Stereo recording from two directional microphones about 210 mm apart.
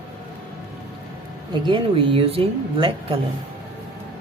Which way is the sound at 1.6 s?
25° right (ahead or behind).